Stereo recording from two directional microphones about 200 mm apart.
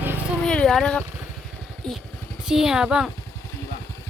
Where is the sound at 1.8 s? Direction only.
5° left (ahead or behind).